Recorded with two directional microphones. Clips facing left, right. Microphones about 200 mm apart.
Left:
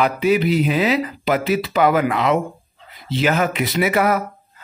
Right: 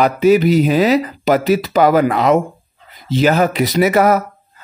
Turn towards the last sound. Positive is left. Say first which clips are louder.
# right 5 dB
turn(degrees=-40)  # may be behind; listen again after turning